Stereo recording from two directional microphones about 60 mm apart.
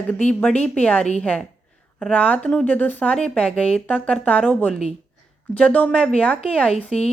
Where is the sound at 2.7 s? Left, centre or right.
Left.